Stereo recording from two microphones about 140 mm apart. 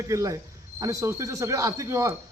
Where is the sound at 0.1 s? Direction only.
20° right (ahead or behind).